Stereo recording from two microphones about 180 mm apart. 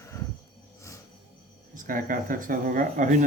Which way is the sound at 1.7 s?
50° right (ahead or behind).